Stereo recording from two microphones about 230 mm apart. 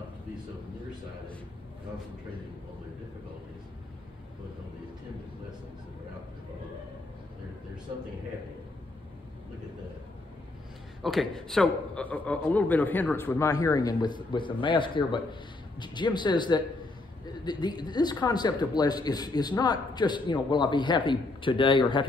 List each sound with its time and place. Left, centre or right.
11.0 s a man's voice: centre; by 22.0 s left